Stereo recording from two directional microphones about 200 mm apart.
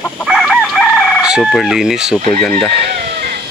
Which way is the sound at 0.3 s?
Centre (ahead or behind).